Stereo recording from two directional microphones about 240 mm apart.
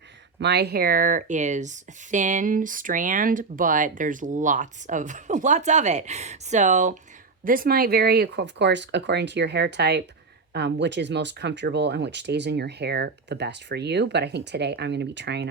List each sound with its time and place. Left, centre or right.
0.3 s speech: right